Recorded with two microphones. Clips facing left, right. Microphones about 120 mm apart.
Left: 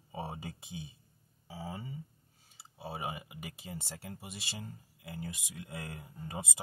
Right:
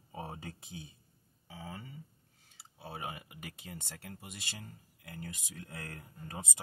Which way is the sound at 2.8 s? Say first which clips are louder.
Left 3 dB; 20° left (ahead or behind).